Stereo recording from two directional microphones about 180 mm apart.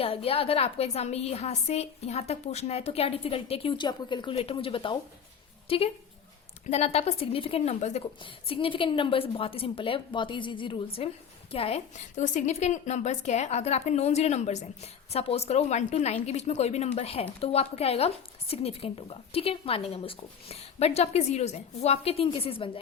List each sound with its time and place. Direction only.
0.0 s a woman's voice: 30° left (ahead or behind)